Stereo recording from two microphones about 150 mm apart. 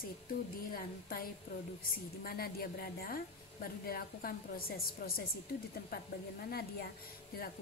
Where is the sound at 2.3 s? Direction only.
90° left.